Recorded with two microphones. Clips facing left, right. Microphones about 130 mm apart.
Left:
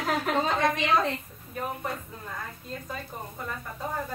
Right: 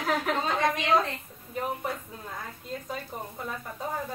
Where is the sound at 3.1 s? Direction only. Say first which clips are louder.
Right 1 dB; 15° right (ahead or behind).